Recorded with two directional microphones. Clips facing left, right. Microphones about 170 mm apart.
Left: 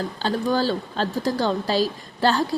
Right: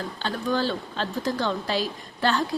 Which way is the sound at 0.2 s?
35° left (ahead or behind).